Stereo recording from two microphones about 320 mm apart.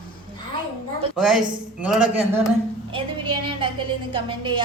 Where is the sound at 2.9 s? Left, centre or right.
Centre.